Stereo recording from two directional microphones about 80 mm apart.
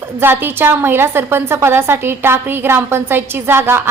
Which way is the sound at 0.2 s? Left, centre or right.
Right.